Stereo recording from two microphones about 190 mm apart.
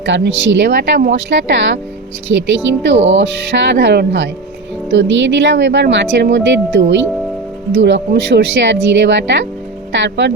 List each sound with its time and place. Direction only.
0.0 s speech: 70° right (ahead or behind)
2.8 s speech: 75° right (ahead or behind)